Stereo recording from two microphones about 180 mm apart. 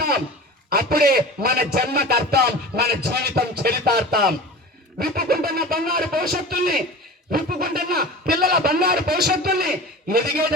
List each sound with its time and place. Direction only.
0.7 s a man's voice: 55° right (ahead or behind)